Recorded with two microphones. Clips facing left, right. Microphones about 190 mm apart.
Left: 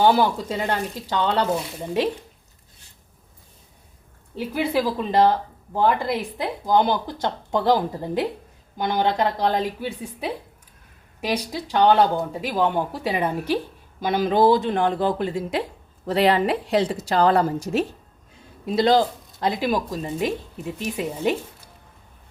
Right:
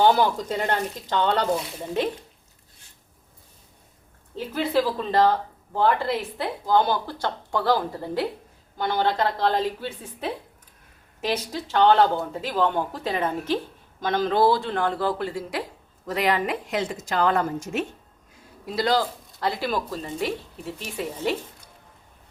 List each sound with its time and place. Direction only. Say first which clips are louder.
0.0 s speech: left 1 dB; 10° left (ahead or behind)
4.4 s speech: left 1 dB; 10° left (ahead or behind); by 17.8 s 35° left (ahead or behind)
18.6 s speech: left 5 dB; 25° left (ahead or behind)